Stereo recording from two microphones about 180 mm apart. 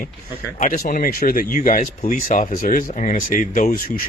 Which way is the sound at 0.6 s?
50° left (ahead or behind).